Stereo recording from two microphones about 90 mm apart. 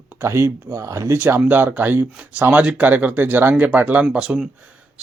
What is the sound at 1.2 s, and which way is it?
Speech, 20° right (ahead or behind).